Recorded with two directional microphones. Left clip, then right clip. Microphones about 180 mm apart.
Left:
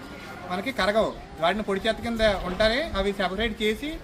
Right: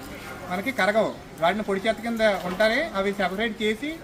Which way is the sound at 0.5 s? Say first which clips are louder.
Right 1 dB; 10° left (ahead or behind).